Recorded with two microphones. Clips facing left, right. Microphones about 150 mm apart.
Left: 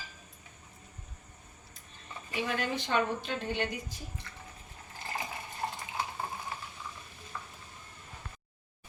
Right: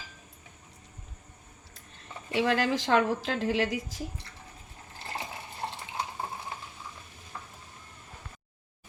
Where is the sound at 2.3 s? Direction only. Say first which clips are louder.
Right 7 dB; 90° right.